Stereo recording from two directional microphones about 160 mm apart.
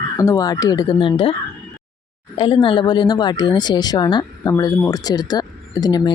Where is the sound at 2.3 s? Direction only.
30° left (ahead or behind).